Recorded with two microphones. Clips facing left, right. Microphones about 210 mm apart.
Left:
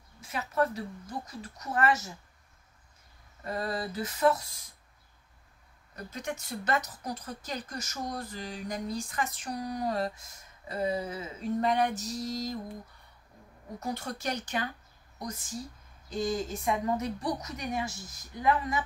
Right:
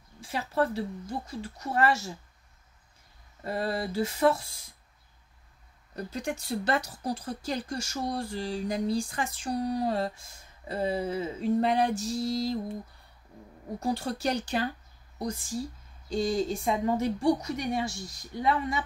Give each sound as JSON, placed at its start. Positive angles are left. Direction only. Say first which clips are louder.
{"t": 0.2, "sound": "a woman's voice", "louder": "right 1 dB", "side_deg": -30}
{"t": 3.4, "sound": "a woman's voice", "louder": "right 3 dB", "side_deg": -30}
{"t": 5.9, "sound": "a woman's voice", "louder": "right 4 dB", "side_deg": -30}
{"t": 13.7, "sound": "a woman's voice", "louder": "right 5 dB", "side_deg": -30}